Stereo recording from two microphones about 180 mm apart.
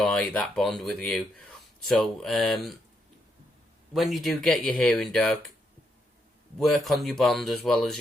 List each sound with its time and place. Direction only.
0.0 s speech: 5° left (ahead or behind)
3.9 s speech: centre (ahead or behind)
6.6 s speech: centre (ahead or behind)